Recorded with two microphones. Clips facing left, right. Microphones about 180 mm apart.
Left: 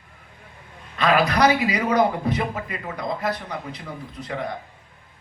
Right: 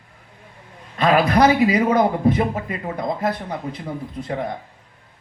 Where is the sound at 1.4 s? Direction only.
50° right (ahead or behind).